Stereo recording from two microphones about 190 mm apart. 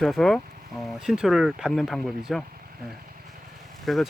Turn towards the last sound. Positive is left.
turn(degrees=0)  # may be behind; listen again after turning